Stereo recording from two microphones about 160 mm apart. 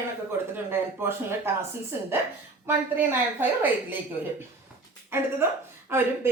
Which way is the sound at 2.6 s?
10° right (ahead or behind).